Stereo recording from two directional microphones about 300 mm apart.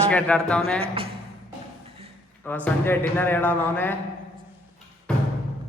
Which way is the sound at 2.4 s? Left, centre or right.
Centre.